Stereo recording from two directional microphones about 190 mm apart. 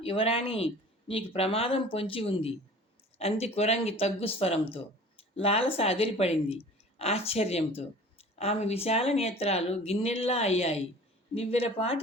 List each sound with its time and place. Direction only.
0.0 s speech: 30° left (ahead or behind)